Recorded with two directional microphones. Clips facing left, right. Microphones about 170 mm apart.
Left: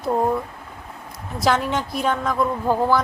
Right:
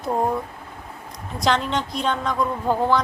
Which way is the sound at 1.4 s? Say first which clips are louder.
Left 1 dB; 5° left (ahead or behind).